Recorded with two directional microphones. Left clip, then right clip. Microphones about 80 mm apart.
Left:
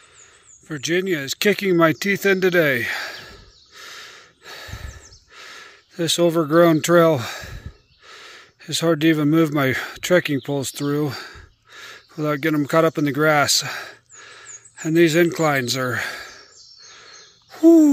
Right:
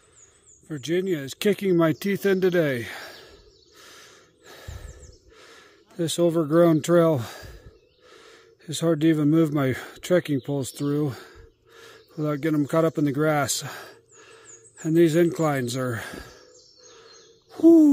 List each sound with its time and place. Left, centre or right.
0.7 s speech: centre; by 2.6 s right
2.6 s a sound: centre
3.7 s gasp: right
8.1 s speech: right
13.5 s sigh: right
14.8 s speech: right
15.6 s speech: right